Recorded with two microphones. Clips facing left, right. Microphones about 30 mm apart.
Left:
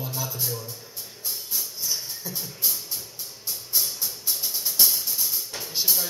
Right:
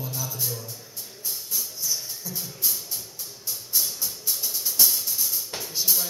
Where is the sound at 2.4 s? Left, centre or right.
Centre.